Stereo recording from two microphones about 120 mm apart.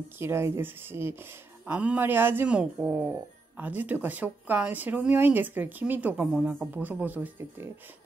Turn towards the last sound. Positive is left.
turn(degrees=-15)  # may be behind; listen again after turning